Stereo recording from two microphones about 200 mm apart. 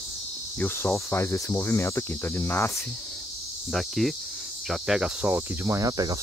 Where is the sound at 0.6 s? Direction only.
10° left (ahead or behind).